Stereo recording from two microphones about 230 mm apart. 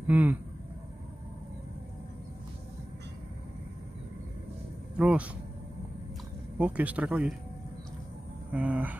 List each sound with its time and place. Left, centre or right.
0.0 s speech: centre
4.9 s speech: centre
6.6 s speech: centre
8.5 s speech: centre